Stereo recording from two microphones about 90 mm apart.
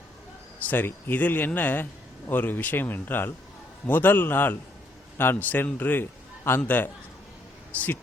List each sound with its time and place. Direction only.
0.7 s a man's voice: 25° left (ahead or behind)